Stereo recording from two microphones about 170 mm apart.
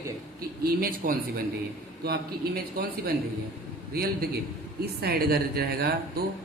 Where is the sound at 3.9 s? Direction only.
65° right (ahead or behind).